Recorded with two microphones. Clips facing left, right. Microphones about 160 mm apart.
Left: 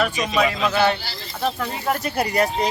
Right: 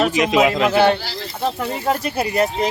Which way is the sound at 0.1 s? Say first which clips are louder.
Right 5 dB; 90° right.